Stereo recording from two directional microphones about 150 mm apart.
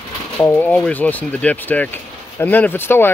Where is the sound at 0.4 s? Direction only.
10° left (ahead or behind).